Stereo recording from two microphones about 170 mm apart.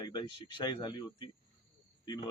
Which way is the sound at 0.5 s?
25° left (ahead or behind).